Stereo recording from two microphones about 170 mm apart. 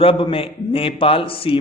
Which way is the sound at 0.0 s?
30° left (ahead or behind).